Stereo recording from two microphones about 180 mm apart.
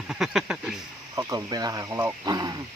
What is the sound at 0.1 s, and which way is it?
Speech, 5° right (ahead or behind).